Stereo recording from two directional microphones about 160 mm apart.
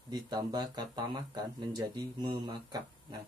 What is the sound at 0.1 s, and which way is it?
Speech, 25° right (ahead or behind).